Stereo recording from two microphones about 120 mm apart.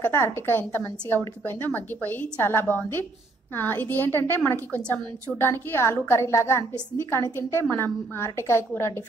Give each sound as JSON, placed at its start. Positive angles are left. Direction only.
{"t": 0.0, "sound": "a woman's voice", "side_deg": 20}